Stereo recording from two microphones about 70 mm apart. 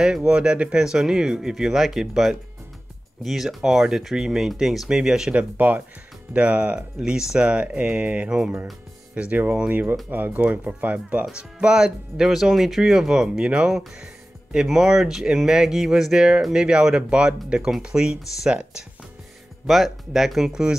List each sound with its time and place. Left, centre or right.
0.0 s speech: centre
19.6 s speech: centre